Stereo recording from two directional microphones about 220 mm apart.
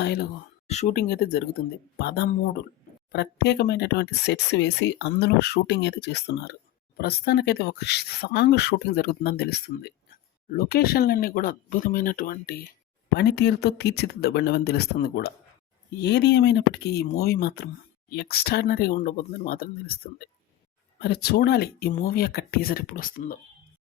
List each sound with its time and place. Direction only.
0.0 s speech: 50° left (ahead or behind)